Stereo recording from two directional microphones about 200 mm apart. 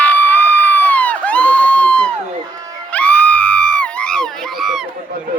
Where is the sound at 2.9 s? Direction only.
5° left (ahead or behind).